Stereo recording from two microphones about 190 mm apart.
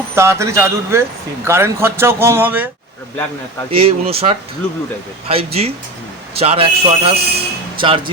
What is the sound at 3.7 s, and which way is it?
Speech, 30° right (ahead or behind).